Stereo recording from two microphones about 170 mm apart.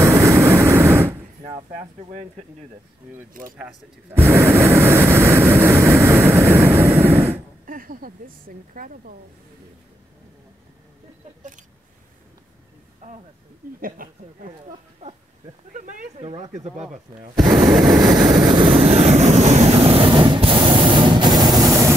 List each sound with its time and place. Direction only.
0.0 s vehicle: 20° right (ahead or behind)
1.7 s speech: 45° right (ahead or behind)
4.2 s vehicle: 15° right (ahead or behind)
7.6 s a woman's voice: 55° right (ahead or behind)
13.0 s a woman's voice: 45° right (ahead or behind)
15.0 s a sound: 40° right (ahead or behind)
15.7 s a sound: 50° right (ahead or behind)
16.2 s speech: 30° right (ahead or behind)
17.4 s speech: 5° right (ahead or behind)
18.0 s vehicle: 25° right (ahead or behind)